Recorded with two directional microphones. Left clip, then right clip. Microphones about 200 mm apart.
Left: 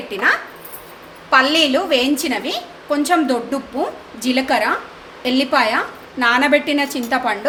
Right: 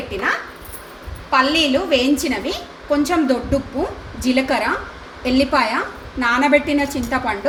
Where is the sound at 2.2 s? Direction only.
20° left (ahead or behind).